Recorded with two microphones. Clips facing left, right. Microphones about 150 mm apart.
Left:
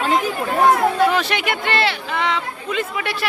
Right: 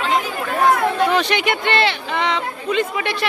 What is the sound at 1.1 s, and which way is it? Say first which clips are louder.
Speech: right 2 dB; 5° left (ahead or behind).